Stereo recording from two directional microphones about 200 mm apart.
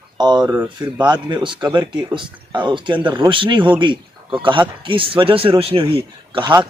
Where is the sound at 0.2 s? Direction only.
20° right (ahead or behind).